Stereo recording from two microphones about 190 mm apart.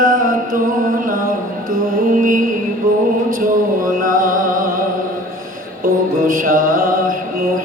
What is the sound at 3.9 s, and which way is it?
Music, 45° right (ahead or behind).